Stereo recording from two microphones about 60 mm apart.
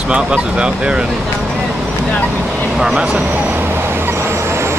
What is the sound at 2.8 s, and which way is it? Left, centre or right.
Speech, centre.